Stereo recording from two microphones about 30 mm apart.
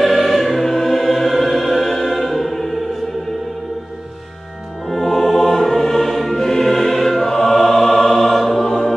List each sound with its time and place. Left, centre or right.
0.0 s choir: centre
4.8 s music: centre
5.4 s music: centre
8.3 s choir: centre
8.6 s music: left